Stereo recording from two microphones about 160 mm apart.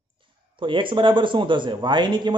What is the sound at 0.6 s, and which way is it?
A man's voice, 30° right (ahead or behind).